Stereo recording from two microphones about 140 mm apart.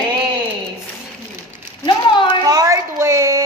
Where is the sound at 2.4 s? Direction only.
25° right (ahead or behind).